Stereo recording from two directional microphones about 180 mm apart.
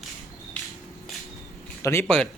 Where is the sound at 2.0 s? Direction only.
5° left (ahead or behind).